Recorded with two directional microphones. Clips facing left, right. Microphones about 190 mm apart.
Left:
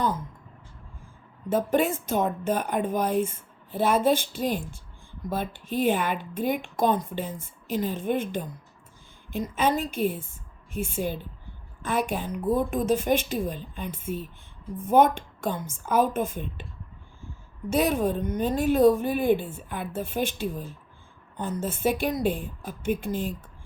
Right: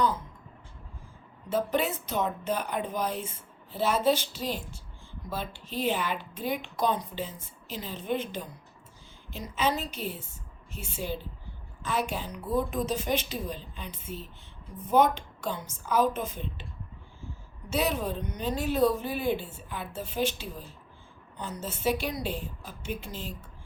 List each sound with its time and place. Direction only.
1.5 s speech: 50° left (ahead or behind)
17.7 s speech: 50° left (ahead or behind)